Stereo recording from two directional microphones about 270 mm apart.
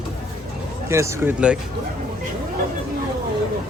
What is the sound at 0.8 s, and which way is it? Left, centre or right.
Speech, centre.